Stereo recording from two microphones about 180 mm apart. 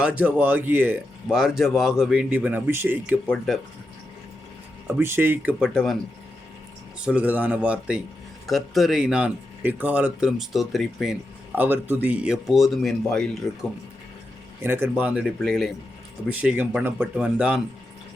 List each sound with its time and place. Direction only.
0.0 s speech: 10° right (ahead or behind)
3.2 s speech: centre (ahead or behind)
4.9 s speech: 15° right (ahead or behind)
7.0 s speech: 5° right (ahead or behind)
14.6 s speech: 15° right (ahead or behind)